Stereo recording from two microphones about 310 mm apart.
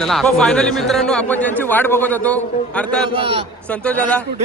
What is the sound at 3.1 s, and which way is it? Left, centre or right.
Speech, centre.